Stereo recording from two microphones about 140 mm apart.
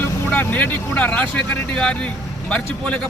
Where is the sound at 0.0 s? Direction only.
15° left (ahead or behind).